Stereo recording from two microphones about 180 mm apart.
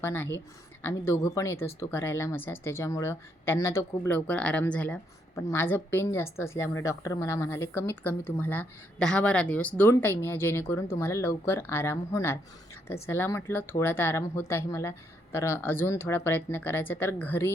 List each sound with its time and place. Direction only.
0.0 s a woman's voice: 10° left (ahead or behind)